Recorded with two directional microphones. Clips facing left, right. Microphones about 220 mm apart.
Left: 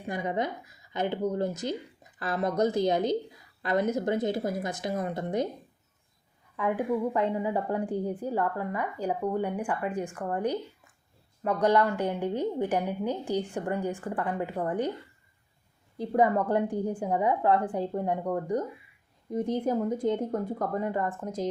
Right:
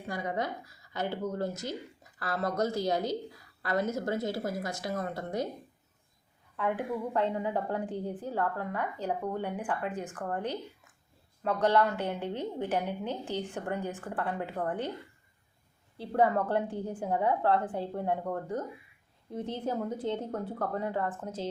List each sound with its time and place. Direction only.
0.1 s a woman's voice: 20° left (ahead or behind)
6.6 s a woman's voice: 10° left (ahead or behind)
16.0 s a woman's voice: 15° left (ahead or behind)